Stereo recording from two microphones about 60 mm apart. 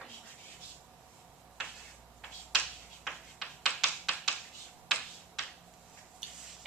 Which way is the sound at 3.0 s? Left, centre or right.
Centre.